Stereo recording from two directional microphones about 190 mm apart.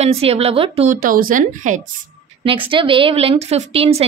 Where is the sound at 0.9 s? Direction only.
50° right (ahead or behind).